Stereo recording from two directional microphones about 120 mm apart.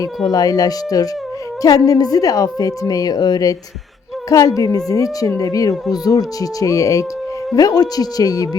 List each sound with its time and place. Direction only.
0.3 s a woman's voice: 30° left (ahead or behind)